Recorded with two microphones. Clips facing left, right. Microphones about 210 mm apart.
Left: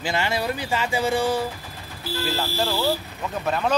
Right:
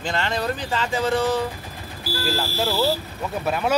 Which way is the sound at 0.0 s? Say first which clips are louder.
Even; 10° left (ahead or behind).